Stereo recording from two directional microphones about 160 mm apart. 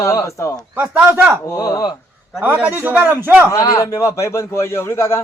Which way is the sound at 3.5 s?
20° left (ahead or behind).